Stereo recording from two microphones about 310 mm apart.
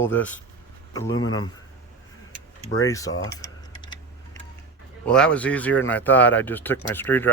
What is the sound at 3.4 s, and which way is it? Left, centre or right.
Typing, centre.